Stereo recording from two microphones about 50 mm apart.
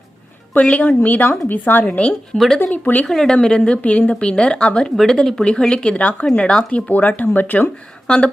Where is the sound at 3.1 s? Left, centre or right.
Centre.